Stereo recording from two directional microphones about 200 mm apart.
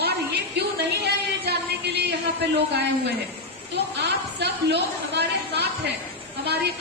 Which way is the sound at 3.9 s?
55° right (ahead or behind).